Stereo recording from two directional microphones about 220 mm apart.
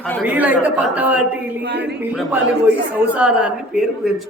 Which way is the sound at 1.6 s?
50° right (ahead or behind).